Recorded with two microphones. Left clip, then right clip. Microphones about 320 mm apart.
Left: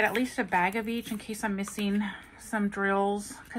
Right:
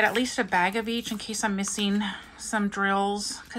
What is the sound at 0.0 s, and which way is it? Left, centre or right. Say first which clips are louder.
Speech: right 3 dB; centre.